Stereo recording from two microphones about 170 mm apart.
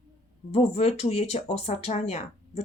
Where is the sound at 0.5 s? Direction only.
35° left (ahead or behind).